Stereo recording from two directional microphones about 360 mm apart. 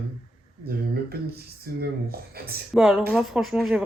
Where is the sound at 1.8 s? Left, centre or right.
Right.